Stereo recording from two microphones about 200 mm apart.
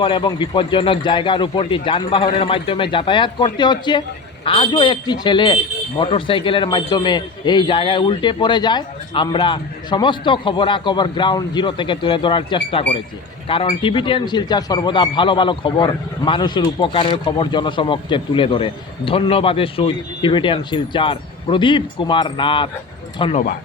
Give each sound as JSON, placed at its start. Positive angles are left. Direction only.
{"t": 0.0, "sound": "speech", "side_deg": 25}